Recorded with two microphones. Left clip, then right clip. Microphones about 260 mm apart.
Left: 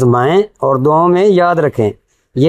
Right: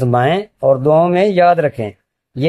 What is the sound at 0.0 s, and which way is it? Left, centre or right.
Speech, left.